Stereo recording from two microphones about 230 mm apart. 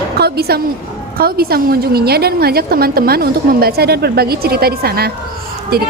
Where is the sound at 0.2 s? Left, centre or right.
Right.